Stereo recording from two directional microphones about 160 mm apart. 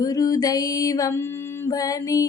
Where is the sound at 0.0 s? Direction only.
20° left (ahead or behind).